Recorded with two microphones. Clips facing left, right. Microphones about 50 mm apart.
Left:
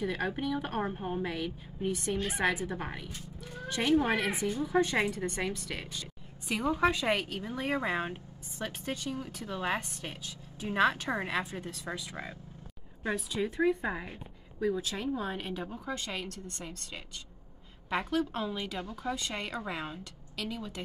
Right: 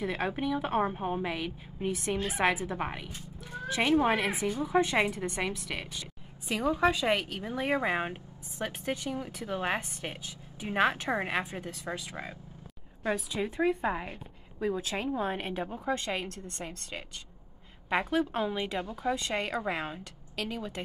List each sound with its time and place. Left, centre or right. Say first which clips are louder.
0.0 s a woman's voice: right 1 dB; centre
5.3 s a woman's voice: right 1 dB; centre
7.4 s speech: right 4 dB; centre
13.4 s a woman's voice: left 1 dB; right
17.8 s a woman's voice: right 2 dB; right